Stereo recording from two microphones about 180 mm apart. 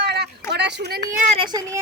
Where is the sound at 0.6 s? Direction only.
70° right (ahead or behind).